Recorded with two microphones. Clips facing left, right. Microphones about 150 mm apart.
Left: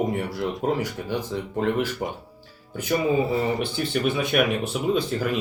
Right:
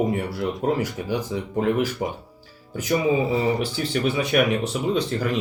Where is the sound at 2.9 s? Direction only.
Centre (ahead or behind).